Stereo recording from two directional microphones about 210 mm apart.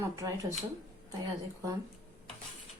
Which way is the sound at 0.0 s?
15° right (ahead or behind).